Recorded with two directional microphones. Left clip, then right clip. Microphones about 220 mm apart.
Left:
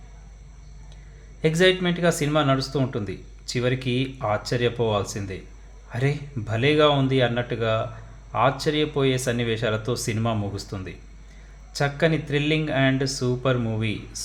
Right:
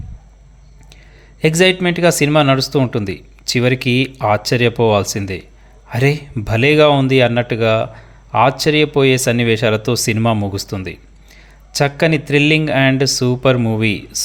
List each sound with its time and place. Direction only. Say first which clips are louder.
1.4 s speech: right 7 dB; 40° right (ahead or behind)